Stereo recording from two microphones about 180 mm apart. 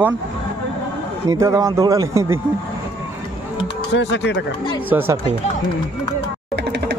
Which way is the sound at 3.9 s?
80° left.